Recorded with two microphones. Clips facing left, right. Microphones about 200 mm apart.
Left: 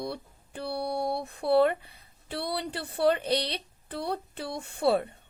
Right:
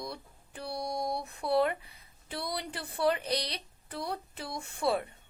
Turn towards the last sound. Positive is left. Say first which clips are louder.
# left 5 dB
turn(degrees=30)  # may be behind; listen again after turning